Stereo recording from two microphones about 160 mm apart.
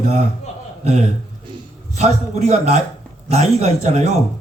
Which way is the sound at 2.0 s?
45° right (ahead or behind).